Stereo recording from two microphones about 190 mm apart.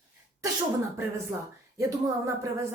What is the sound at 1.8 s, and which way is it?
Speech, 15° right (ahead or behind).